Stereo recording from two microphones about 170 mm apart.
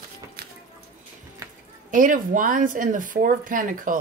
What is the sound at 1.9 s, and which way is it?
Speech, 50° right (ahead or behind).